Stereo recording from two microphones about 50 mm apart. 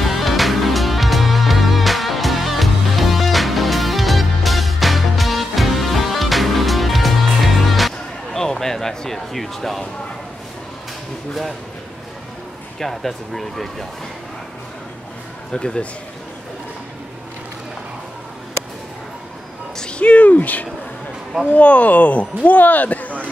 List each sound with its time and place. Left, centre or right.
0.0 s music: centre
12.7 s speech: centre
15.5 s speech: centre
19.8 s a sound: left
21.5 s speech: left